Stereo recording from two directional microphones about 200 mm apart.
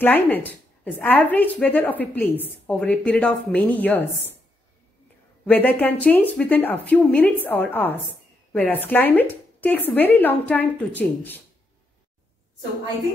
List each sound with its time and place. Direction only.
0.0 s speech: 10° left (ahead or behind)
5.4 s speech: 10° left (ahead or behind)